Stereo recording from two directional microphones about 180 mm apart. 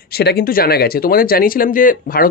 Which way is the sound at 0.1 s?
60° left (ahead or behind).